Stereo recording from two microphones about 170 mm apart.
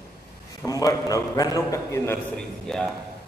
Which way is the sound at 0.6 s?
20° left (ahead or behind).